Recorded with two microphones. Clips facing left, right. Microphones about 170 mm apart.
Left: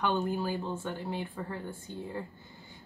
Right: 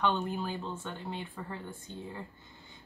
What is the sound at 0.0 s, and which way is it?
Speech, 10° left (ahead or behind).